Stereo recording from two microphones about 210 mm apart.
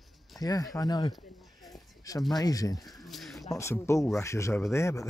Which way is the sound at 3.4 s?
15° left (ahead or behind).